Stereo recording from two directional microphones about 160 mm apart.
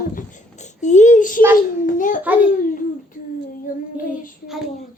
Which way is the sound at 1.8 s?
55° left (ahead or behind).